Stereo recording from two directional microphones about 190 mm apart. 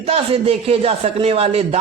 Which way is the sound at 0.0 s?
30° right (ahead or behind).